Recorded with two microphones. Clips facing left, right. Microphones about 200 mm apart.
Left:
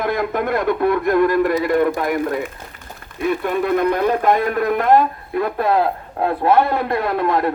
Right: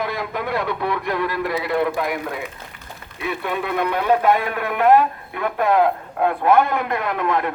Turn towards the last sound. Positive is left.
turn(degrees=35)  # may be behind; listen again after turning